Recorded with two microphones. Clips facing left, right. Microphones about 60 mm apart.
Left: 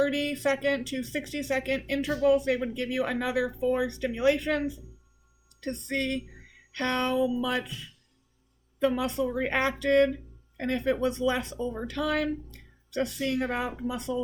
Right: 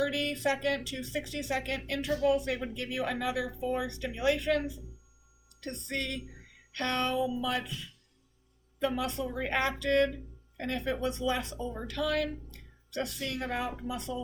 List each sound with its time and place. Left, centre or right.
0.0 s speech: left
8.8 s speech: left